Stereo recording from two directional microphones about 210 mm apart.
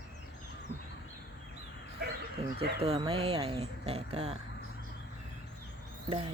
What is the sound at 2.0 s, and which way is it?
Bow-wow, 50° right (ahead or behind).